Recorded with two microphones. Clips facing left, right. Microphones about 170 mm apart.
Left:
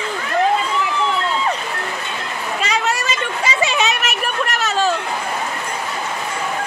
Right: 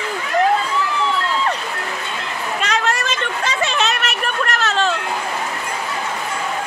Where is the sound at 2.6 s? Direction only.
5° left (ahead or behind).